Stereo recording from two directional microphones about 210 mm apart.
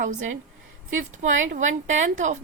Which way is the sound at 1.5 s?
35° right (ahead or behind).